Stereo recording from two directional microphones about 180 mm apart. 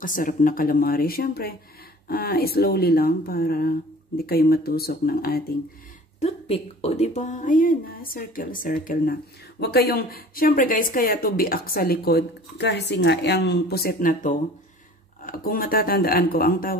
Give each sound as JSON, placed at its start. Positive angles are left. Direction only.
{"t": 0.0, "sound": "speech", "side_deg": 50}
{"t": 6.1, "sound": "speech", "side_deg": 35}